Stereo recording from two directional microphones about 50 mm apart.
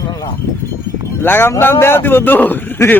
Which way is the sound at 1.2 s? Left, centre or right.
Left.